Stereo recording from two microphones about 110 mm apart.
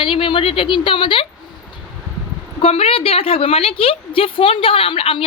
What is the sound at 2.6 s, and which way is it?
A woman's voice, 65° left (ahead or behind).